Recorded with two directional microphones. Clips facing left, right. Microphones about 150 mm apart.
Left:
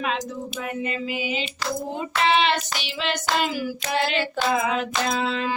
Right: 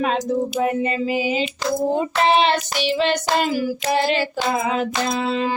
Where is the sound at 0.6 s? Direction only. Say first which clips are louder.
Right 8 dB; 35° right (ahead or behind).